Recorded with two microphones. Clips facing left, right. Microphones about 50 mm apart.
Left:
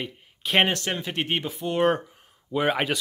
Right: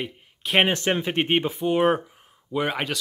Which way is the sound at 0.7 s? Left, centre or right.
Right.